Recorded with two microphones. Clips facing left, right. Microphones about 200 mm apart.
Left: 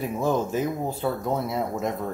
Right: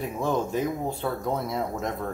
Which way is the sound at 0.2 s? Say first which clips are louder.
Left 1 dB; 5° left (ahead or behind).